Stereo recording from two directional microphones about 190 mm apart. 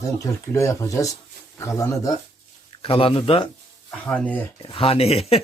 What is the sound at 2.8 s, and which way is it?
Speech, 30° left (ahead or behind).